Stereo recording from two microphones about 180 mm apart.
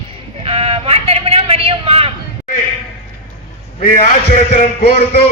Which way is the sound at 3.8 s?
50° left (ahead or behind).